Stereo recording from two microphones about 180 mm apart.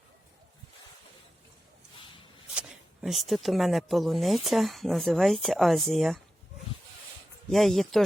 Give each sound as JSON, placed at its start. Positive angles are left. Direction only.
{"t": 2.0, "sound": "walk", "side_deg": 30}
{"t": 2.6, "sound": "speech", "side_deg": 0}
{"t": 7.5, "sound": "speech", "side_deg": 0}